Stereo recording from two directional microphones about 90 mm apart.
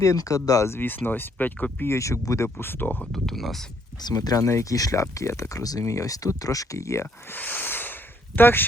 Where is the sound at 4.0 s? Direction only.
50° left (ahead or behind).